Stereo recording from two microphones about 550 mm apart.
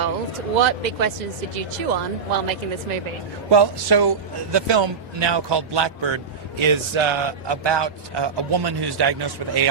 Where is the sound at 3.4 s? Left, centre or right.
Right.